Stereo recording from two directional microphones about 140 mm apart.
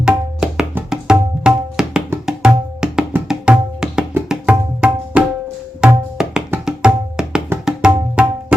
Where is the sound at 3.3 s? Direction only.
5° right (ahead or behind).